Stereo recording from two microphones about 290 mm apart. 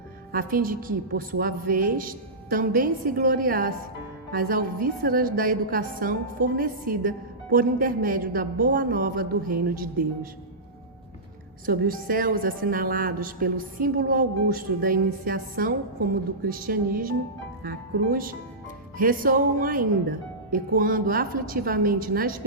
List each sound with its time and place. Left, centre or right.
0.3 s a woman's voice: right
11.6 s a woman's voice: right